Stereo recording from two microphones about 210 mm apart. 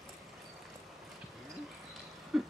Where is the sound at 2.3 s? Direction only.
5° right (ahead or behind).